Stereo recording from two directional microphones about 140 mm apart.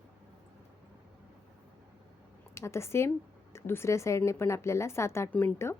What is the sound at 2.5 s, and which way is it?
A woman's voice, 20° left (ahead or behind).